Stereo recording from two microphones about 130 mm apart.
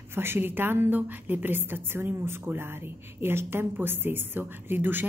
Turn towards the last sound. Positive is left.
turn(degrees=-15)  # may be behind; listen again after turning